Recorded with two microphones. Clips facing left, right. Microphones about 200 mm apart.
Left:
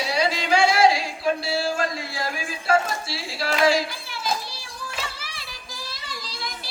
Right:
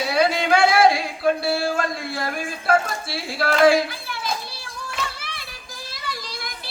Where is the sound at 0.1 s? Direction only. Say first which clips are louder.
Right 4 dB; 55° right (ahead or behind).